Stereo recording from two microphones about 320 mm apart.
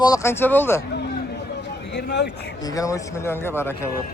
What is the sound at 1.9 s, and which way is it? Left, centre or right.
Speech, left.